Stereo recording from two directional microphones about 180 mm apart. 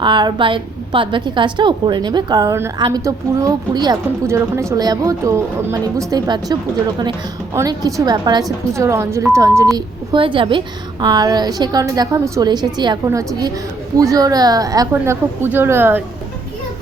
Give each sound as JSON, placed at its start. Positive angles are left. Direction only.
{"t": 0.0, "sound": "a woman's voice", "side_deg": -25}
{"t": 9.7, "sound": "a woman's voice", "side_deg": -25}